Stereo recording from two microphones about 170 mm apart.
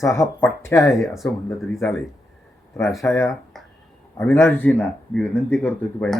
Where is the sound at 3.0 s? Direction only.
15° left (ahead or behind).